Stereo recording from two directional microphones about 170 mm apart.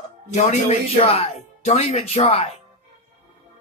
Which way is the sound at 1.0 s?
35° left (ahead or behind).